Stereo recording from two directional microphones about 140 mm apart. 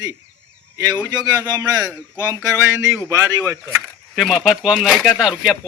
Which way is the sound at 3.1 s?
20° right (ahead or behind).